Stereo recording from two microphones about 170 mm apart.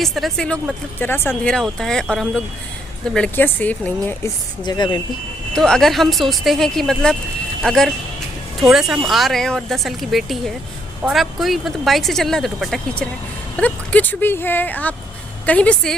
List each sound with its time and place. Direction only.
0.0 s speech: centre (ahead or behind)
4.6 s speech: 25° left (ahead or behind)
5.5 s speech: 5° left (ahead or behind)